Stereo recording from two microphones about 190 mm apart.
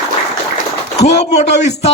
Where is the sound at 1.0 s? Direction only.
35° left (ahead or behind).